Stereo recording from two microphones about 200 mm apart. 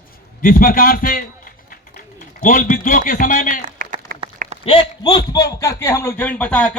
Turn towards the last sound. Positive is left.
turn(degrees=5)  # may be behind; listen again after turning